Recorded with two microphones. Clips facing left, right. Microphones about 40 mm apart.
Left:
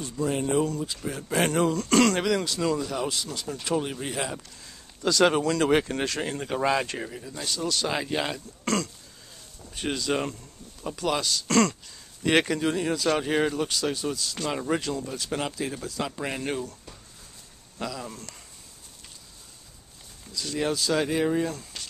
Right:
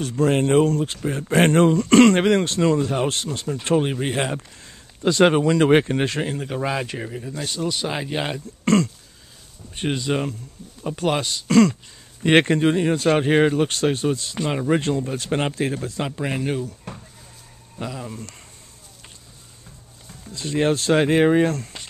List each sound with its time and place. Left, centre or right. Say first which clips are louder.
0.2 s speech: right 8 dB; right
1.0 s speech: right 7 dB; right
4.4 s speech: right 4 dB; right
6.2 s a man's voice: right 1 dB; centre
7.4 s speech: right 2 dB; right
10.6 s speech: right 5 dB; centre
11.0 s speech: right 4 dB; right
11.4 s a man's voice: right 7 dB; centre
12.2 s speech: right 6 dB; right
14.8 s speech: right 7 dB; right
16.1 s a man's voice: right 6 dB; centre
16.4 s a man's voice: right 5 dB; centre
17.8 s speech: right 2 dB; centre
20.2 s speech: right 7 dB; right